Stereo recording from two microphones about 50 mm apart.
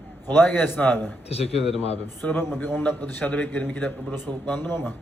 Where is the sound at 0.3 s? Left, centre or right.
Left.